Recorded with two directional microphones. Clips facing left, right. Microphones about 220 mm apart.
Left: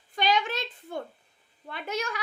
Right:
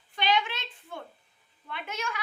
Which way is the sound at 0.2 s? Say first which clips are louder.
Left 2 dB; 40° left (ahead or behind).